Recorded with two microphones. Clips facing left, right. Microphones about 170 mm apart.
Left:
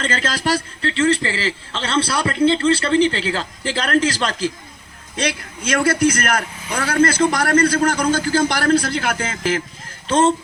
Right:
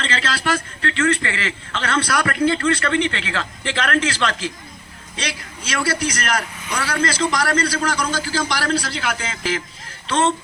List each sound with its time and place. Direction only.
0.0 s a man's voice: 45° left (ahead or behind)
5.1 s a man's voice: 55° left (ahead or behind)